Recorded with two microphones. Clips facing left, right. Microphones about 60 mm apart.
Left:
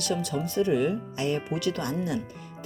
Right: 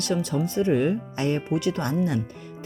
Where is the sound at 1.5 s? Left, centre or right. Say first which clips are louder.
Right 4 dB; right.